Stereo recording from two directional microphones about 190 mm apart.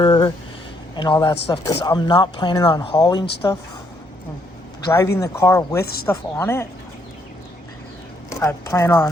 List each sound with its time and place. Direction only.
0.0 s speech: 25° left (ahead or behind)
4.9 s speech: 15° left (ahead or behind)
5.8 s speech: 55° left (ahead or behind)
6.1 s speech: 10° left (ahead or behind)
8.3 s speech: 15° left (ahead or behind)